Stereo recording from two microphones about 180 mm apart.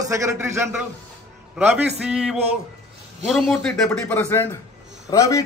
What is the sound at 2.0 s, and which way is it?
Speech, 5° right (ahead or behind).